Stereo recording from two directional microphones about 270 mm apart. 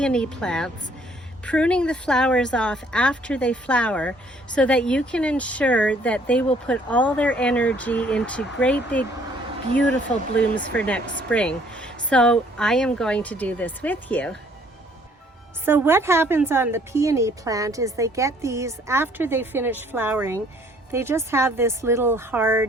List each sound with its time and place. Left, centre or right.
0.0 s speech: centre
15.6 s a woman's voice: centre